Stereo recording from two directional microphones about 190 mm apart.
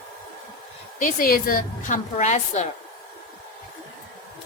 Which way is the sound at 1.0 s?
50° left (ahead or behind).